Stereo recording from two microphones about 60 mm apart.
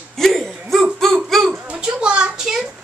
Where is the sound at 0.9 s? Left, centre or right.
Centre.